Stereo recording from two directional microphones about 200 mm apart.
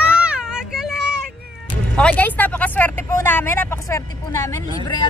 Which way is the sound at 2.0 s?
5° left (ahead or behind).